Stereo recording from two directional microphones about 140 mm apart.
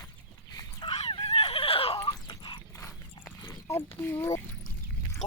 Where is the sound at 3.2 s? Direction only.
35° left (ahead or behind).